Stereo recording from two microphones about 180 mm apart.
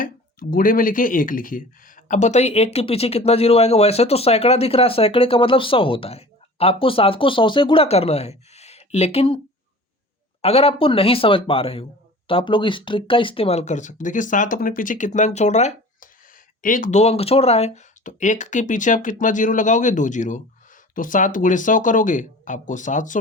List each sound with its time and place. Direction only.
0.0 s speech: 50° left (ahead or behind); by 9.4 s 30° left (ahead or behind)
10.4 s speech: 35° left (ahead or behind)